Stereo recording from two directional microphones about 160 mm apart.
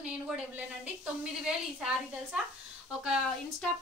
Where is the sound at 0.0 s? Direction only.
10° right (ahead or behind).